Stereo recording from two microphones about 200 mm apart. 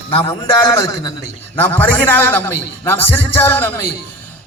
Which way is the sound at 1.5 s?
10° left (ahead or behind).